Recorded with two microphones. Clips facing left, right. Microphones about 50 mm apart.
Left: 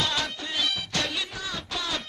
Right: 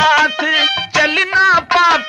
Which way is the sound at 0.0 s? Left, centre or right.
Right.